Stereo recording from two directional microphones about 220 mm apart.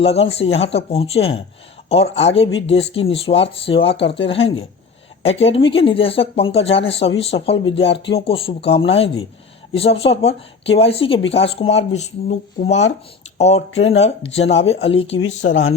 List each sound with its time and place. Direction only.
0.0 s speech: 25° left (ahead or behind)